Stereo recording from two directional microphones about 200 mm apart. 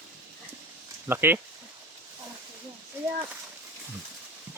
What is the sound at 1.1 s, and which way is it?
Speech, 10° right (ahead or behind).